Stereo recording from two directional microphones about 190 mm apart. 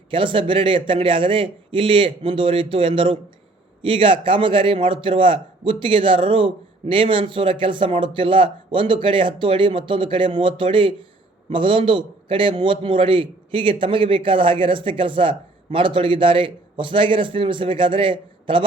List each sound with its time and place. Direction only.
0.1 s a man's voice: 25° right (ahead or behind)